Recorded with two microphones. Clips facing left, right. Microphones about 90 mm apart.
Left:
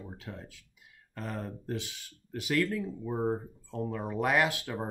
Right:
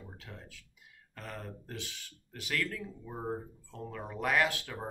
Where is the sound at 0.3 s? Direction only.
25° left (ahead or behind).